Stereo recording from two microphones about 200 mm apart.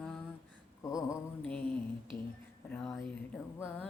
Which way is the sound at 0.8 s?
15° left (ahead or behind).